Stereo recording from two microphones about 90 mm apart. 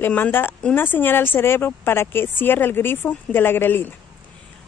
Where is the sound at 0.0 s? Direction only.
20° left (ahead or behind).